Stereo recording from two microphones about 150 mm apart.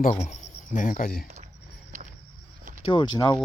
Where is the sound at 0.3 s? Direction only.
60° left (ahead or behind); by 1.3 s 80° left.